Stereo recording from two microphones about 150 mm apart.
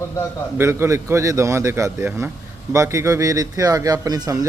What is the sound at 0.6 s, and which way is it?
A man's voice, 15° right (ahead or behind).